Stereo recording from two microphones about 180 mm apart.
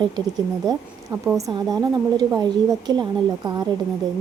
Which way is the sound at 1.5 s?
20° right (ahead or behind).